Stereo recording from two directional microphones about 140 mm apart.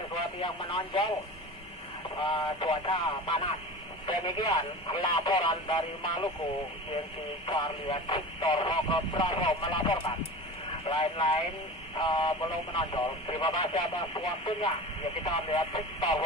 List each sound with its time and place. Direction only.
0.4 s speech: 35° left (ahead or behind)
2.1 s speech: 35° left (ahead or behind)
7.4 s speech: 30° left (ahead or behind)